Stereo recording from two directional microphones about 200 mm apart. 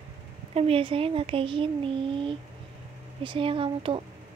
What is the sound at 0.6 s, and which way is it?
A woman's voice, 30° right (ahead or behind).